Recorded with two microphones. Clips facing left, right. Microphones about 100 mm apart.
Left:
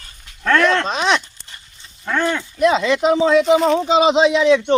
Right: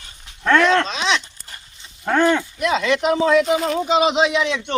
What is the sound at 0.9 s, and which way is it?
Speech, 50° left (ahead or behind).